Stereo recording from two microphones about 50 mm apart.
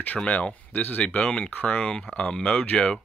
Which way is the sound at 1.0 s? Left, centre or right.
Left.